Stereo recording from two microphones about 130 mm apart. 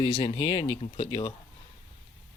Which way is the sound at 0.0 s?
45° left (ahead or behind).